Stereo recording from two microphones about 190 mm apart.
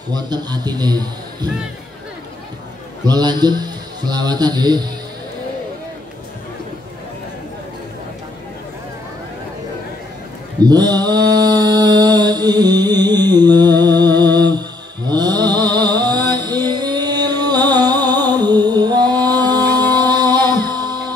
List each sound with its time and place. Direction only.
0.1 s a man's voice: 20° right (ahead or behind)
3.1 s a man's voice: 20° right (ahead or behind)
10.6 s mantra: 20° right (ahead or behind)
15.0 s a sound: 20° right (ahead or behind)
19.6 s music: 10° left (ahead or behind)
20.0 s music: 20° right (ahead or behind)